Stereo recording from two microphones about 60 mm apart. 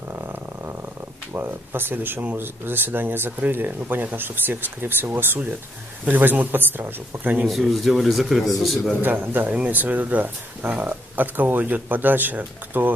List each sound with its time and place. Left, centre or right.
0.1 s purr: right
1.3 s speech: right
7.7 s a man's voice: centre
9.0 s speech: right
9.5 s speech: right